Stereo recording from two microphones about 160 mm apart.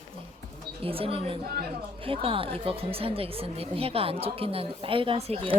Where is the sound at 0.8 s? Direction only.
35° right (ahead or behind).